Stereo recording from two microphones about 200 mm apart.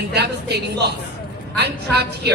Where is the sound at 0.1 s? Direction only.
55° right (ahead or behind).